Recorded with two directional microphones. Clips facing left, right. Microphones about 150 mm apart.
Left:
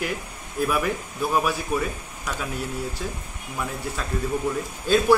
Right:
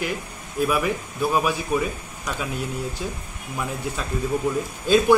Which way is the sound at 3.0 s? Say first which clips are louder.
Right 1 dB; 15° right (ahead or behind).